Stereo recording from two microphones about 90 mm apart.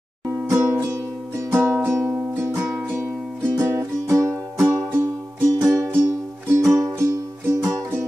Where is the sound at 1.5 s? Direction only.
30° right (ahead or behind).